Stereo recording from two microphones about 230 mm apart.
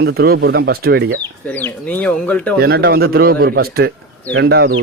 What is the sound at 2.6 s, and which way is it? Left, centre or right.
Speech, right.